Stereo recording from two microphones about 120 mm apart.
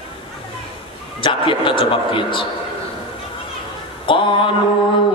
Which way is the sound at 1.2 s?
45° left (ahead or behind).